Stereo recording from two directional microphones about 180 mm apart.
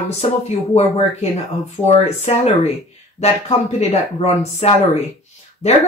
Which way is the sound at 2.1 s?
35° left (ahead or behind).